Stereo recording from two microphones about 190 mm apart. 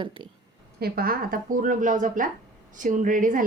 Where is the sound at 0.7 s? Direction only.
55° right (ahead or behind).